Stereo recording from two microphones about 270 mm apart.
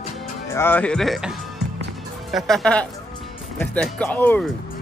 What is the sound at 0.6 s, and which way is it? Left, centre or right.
Speech, centre.